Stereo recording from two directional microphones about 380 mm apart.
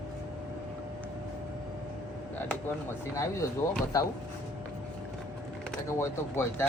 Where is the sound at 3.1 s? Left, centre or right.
Centre.